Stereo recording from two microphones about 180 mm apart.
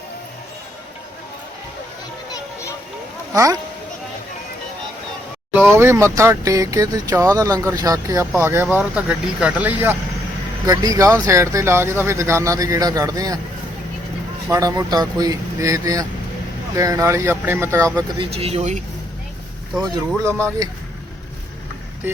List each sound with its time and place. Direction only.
2.3 s a sound: 15° left (ahead or behind)
3.3 s speech: 20° right (ahead or behind)
5.5 s speech: 10° right (ahead or behind)
14.4 s speech: 15° right (ahead or behind)
18.2 s speech: 30° right (ahead or behind)
19.8 s speech: 20° right (ahead or behind)